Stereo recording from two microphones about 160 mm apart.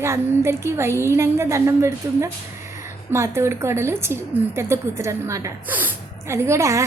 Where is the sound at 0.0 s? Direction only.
15° right (ahead or behind).